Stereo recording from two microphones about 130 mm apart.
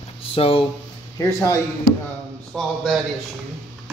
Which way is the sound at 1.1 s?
25° left (ahead or behind).